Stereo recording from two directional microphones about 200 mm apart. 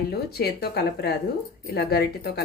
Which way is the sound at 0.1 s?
50° left (ahead or behind).